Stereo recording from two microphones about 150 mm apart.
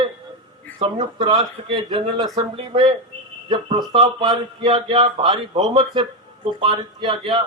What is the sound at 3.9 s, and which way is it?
A man's voice, 45° right (ahead or behind).